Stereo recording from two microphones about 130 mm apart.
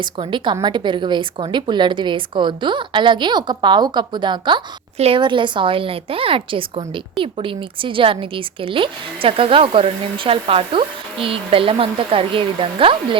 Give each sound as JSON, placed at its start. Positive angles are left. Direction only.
{"t": 0.0, "sound": "a woman's voice", "side_deg": -40}
{"t": 4.9, "sound": "a woman's voice", "side_deg": -50}
{"t": 5.2, "sound": "a woman's voice", "side_deg": -40}